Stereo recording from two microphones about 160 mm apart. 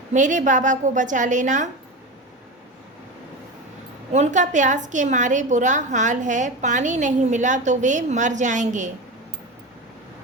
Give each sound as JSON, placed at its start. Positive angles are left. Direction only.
{"t": 0.1, "sound": "a woman's voice", "side_deg": -50}
{"t": 4.1, "sound": "a woman's voice", "side_deg": -50}